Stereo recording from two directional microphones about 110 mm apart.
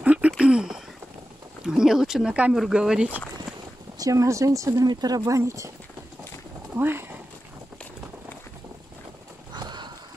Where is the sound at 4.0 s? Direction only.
30° right (ahead or behind).